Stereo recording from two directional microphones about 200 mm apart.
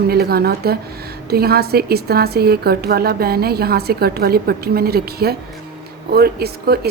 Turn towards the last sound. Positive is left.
turn(degrees=-50)  # may be behind; listen again after turning